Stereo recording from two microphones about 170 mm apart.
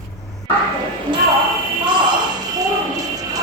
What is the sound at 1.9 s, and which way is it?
Music, 25° right (ahead or behind).